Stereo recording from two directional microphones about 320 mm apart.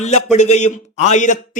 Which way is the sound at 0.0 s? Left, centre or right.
Left.